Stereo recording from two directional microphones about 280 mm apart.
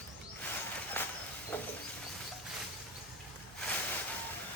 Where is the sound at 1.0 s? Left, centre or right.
Centre.